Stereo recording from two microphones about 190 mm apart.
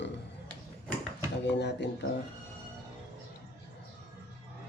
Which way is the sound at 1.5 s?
65° left (ahead or behind).